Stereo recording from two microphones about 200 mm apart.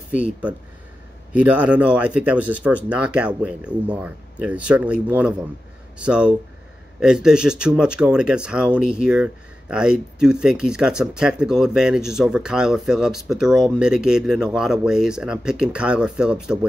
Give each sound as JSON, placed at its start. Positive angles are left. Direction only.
{"t": 0.1, "sound": "speech", "side_deg": -5}